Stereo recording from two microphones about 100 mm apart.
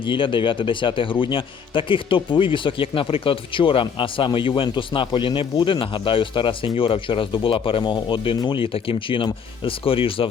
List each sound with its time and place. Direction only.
0.0 s speech: 55° left (ahead or behind)